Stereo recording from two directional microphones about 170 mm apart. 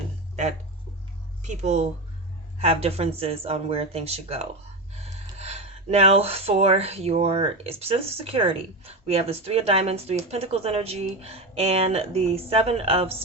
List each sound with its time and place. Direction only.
1.4 s speech: 45° right (ahead or behind)